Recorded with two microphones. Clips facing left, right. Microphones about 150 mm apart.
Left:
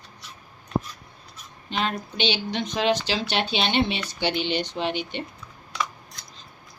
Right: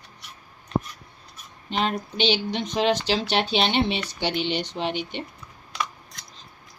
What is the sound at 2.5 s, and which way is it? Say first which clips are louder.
Speech: right 1 dB; 30° right (ahead or behind).